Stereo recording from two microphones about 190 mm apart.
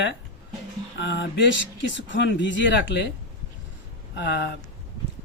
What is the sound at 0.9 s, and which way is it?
Speech, 70° left (ahead or behind).